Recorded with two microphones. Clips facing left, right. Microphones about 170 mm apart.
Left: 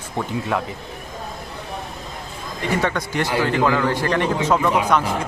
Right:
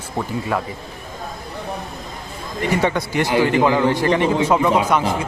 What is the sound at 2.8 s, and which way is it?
Speech, 10° right (ahead or behind).